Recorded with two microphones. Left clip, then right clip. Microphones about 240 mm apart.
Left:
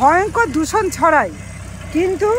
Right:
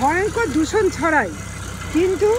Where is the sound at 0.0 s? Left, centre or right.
Centre.